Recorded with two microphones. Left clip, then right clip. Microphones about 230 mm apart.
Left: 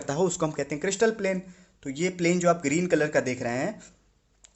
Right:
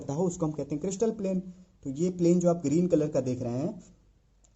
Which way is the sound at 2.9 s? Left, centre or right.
Left.